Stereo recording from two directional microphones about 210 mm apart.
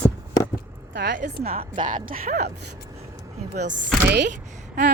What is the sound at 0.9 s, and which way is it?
Speech, 55° right (ahead or behind).